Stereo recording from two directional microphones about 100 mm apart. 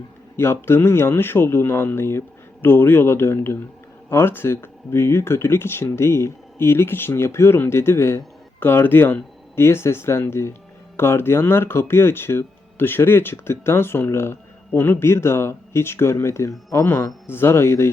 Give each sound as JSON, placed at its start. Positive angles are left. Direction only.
{"t": 0.3, "sound": "speech", "side_deg": 25}